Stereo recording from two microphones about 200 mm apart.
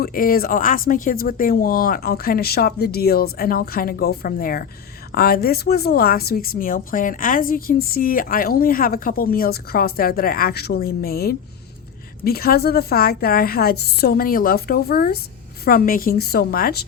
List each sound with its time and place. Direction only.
0.0 s speech: 45° left (ahead or behind)